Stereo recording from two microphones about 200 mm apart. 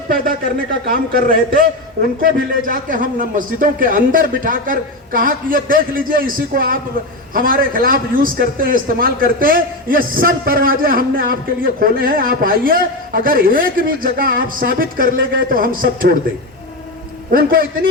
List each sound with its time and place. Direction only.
0.1 s a man's voice: 45° right (ahead or behind)
17.3 s a man's voice: 45° right (ahead or behind)